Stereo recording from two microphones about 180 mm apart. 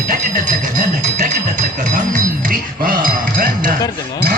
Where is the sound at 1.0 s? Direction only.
45° right (ahead or behind).